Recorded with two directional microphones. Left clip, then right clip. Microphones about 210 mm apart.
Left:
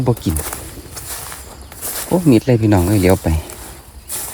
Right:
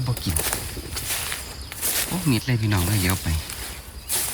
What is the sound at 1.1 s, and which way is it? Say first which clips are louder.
Walk: right 3 dB; centre (ahead or behind).